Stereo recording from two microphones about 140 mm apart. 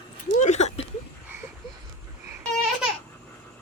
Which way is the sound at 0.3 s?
55° left (ahead or behind).